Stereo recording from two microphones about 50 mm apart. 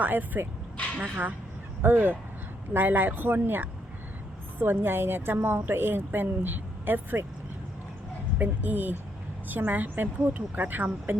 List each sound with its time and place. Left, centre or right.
0.0 s a woman's voice: right
8.4 s a woman's voice: right